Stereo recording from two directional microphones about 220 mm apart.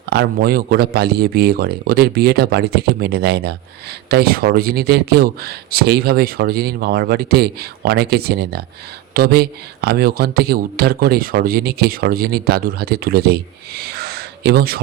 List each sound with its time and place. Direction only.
0.0 s speech: 50° right (ahead or behind)